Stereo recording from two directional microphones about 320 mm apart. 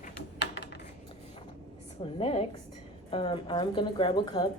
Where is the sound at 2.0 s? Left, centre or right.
Centre.